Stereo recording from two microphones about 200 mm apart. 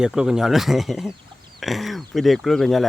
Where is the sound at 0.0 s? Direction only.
5° right (ahead or behind).